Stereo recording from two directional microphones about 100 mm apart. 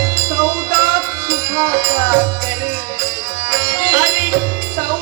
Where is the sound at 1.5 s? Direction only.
45° right (ahead or behind).